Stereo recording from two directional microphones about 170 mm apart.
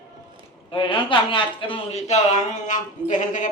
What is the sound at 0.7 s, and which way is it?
A man's voice, 30° left (ahead or behind).